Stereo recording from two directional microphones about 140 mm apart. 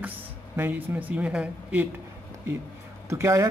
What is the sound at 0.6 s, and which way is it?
Speech, 15° right (ahead or behind).